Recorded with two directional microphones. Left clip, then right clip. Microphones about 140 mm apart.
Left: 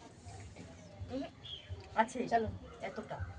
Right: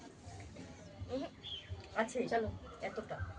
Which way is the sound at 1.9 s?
5° right (ahead or behind).